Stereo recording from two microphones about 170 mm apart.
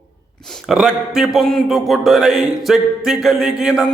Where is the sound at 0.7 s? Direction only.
5° right (ahead or behind).